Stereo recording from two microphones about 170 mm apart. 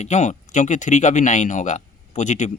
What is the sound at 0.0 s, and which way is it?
Speech, 45° left (ahead or behind).